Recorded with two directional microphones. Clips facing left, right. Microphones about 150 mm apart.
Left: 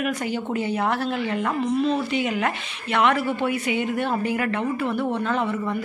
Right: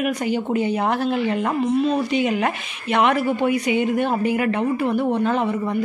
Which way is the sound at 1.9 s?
20° right (ahead or behind).